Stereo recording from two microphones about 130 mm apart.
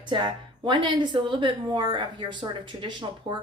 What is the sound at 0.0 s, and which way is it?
A woman's voice, 35° right (ahead or behind).